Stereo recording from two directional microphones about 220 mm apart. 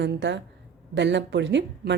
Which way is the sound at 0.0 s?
55° right (ahead or behind).